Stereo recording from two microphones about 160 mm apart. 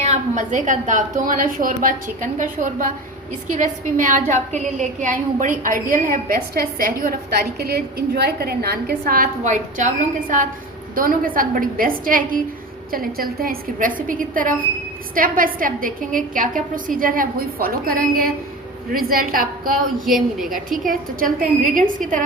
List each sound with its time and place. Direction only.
0.0 s a woman's voice: 45° right (ahead or behind)
3.9 s a woman's voice: 55° right (ahead or behind)
20.1 s a woman's voice: centre (ahead or behind)
20.5 s a woman's voice: 60° right (ahead or behind)